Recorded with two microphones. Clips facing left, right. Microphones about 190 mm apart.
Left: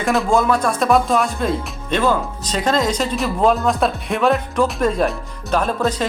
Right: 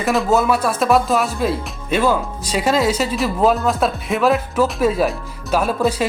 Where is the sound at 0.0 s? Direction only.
Centre (ahead or behind).